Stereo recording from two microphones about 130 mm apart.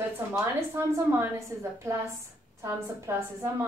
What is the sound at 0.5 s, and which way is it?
A woman's voice, 20° right (ahead or behind).